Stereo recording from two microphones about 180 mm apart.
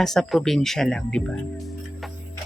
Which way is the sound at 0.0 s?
Centre (ahead or behind).